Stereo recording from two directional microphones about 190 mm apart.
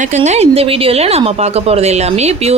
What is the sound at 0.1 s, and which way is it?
A woman's voice, 35° right (ahead or behind).